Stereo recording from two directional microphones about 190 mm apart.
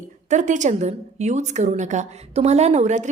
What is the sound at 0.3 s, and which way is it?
A woman's voice, 40° right (ahead or behind).